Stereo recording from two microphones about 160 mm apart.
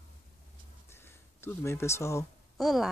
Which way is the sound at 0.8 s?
15° left (ahead or behind).